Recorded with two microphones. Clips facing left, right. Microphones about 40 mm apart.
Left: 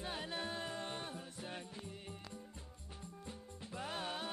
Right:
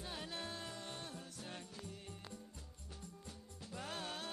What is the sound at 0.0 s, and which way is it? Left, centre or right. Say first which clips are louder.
Music: left 4 dB; left.